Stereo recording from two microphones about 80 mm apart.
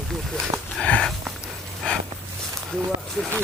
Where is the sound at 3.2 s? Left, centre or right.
Centre.